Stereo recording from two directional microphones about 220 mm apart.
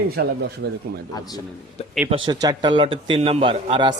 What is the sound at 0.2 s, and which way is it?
Speech, 45° right (ahead or behind).